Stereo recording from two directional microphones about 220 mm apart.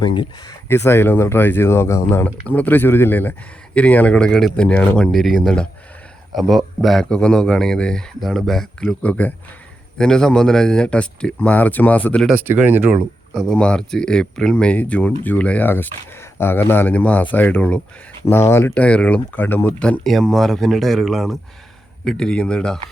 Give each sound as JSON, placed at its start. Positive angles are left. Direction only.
{"t": 0.2, "sound": "speech", "side_deg": 20}
{"t": 12.3, "sound": "speech", "side_deg": -10}